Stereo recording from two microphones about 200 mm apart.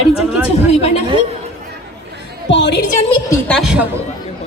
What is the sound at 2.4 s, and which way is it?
Speech, 60° left (ahead or behind).